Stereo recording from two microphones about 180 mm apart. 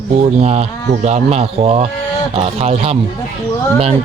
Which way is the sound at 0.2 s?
35° right (ahead or behind).